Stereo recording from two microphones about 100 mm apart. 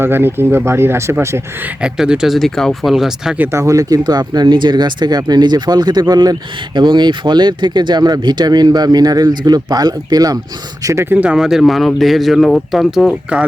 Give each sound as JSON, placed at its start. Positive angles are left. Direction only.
{"t": 0.0, "sound": "speech", "side_deg": -25}
{"t": 1.6, "sound": "speech", "side_deg": -10}
{"t": 3.3, "sound": "speech", "side_deg": -20}
{"t": 3.6, "sound": "speech", "side_deg": -35}
{"t": 10.8, "sound": "speech", "side_deg": -25}